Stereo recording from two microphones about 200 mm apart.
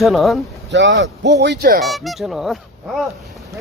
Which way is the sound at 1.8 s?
Centre (ahead or behind).